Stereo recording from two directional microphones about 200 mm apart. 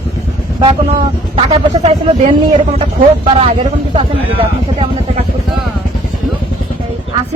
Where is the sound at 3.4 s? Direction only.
25° right (ahead or behind).